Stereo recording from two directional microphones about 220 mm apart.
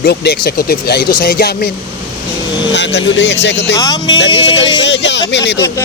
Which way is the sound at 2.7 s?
55° left (ahead or behind).